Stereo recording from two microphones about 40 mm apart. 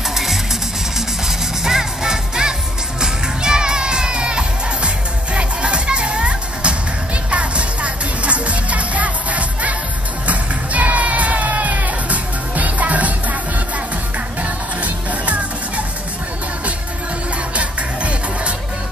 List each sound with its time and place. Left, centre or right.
0.1 s music: centre; by 13.4 s right
14.4 s music: right
17.6 s music: right